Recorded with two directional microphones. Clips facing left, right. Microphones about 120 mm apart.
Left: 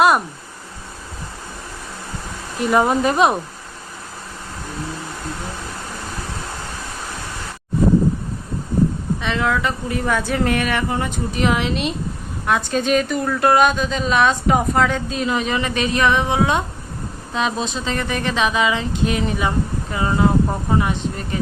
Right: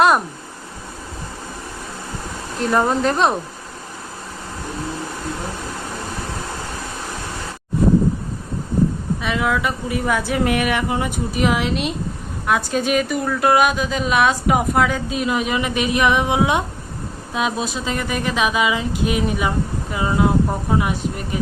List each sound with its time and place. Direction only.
2.6 s speech: 10° left (ahead or behind)
9.2 s a woman's voice: 5° right (ahead or behind)